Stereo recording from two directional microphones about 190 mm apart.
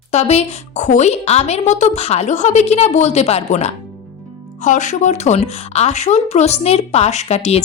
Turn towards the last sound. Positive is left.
turn(degrees=35)  # may be behind; listen again after turning